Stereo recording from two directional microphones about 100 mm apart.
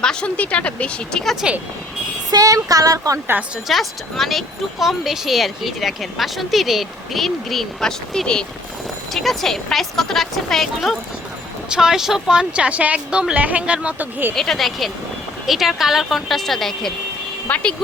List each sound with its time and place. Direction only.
0.0 s a woman's voice: 10° left (ahead or behind)
2.3 s speech: 35° right (ahead or behind)
3.7 s speech: centre (ahead or behind); by 14.3 s 20° right (ahead or behind)
14.3 s a woman's voice: 5° left (ahead or behind)